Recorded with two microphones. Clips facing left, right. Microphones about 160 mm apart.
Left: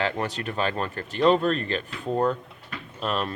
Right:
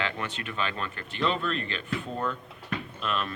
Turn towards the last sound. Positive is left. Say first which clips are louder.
# left 3 dB
turn(degrees=40)  # may be behind; listen again after turning